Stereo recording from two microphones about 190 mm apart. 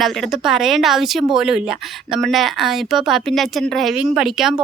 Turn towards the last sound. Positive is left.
turn(degrees=0)  # may be behind; listen again after turning